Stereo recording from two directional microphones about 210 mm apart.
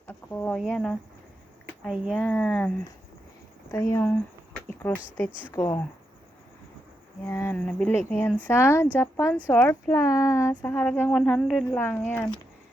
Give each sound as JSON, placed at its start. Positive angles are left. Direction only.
{"t": 0.1, "sound": "speech", "side_deg": 10}
{"t": 7.3, "sound": "speech", "side_deg": 10}